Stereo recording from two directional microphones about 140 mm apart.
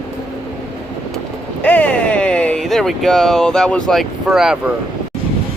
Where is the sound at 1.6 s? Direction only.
10° left (ahead or behind).